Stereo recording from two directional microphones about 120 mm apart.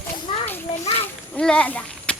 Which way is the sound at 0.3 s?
45° left (ahead or behind).